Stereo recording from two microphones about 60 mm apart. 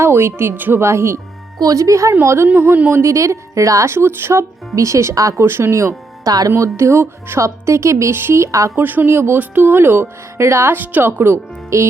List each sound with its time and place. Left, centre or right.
0.0 s speech: right
0.8 s speech: right
1.5 s speech: right
2.2 s speech: right
2.5 s speech: right
2.9 s a woman's voice: right
3.9 s speech: right
4.7 s a woman's voice: right
5.5 s speech: right
6.2 s speech: right
6.6 s speech: right
8.7 s speech: right
10.8 s speech: right